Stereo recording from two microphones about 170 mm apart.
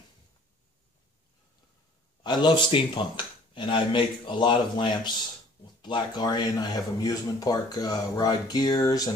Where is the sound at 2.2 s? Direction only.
25° left (ahead or behind).